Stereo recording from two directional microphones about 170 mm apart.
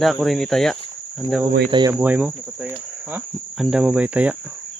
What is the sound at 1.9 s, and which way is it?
Cricket, 10° right (ahead or behind).